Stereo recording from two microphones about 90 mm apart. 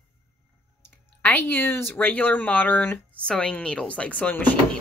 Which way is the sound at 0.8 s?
20° left (ahead or behind).